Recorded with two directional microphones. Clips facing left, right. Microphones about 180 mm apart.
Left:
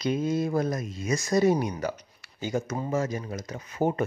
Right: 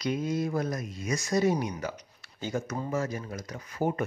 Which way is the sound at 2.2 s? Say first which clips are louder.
Left 3 dB; 10° left (ahead or behind).